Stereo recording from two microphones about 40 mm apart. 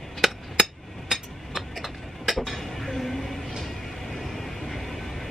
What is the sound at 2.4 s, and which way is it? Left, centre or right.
Dishes, centre.